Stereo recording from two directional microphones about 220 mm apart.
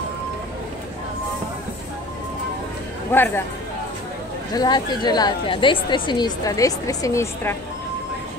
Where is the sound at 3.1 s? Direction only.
10° left (ahead or behind).